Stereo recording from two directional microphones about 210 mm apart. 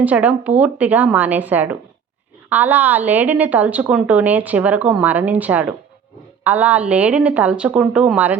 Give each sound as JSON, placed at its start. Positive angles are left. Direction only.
{"t": 0.0, "sound": "a woman's voice", "side_deg": -5}